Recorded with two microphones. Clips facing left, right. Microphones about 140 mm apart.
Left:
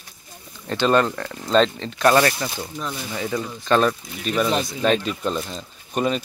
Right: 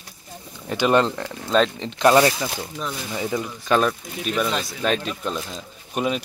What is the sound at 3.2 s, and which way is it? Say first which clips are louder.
Speech: right 1 dB; 15° right (ahead or behind).